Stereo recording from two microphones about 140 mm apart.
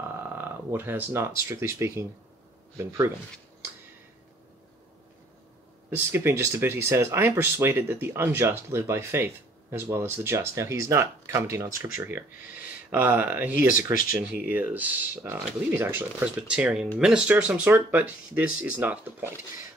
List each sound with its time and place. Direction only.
0.4 s speech: 15° right (ahead or behind)
5.9 s speech: 15° right (ahead or behind)